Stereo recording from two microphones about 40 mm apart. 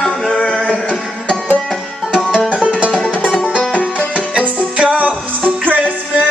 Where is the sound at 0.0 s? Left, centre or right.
Centre.